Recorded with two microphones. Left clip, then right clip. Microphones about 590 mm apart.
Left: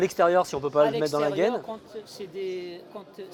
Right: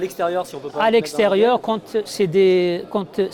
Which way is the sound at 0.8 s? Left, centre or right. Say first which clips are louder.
Right 6 dB; right.